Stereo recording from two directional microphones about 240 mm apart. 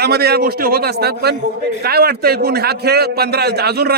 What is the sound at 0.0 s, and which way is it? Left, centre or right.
A man's voice, right.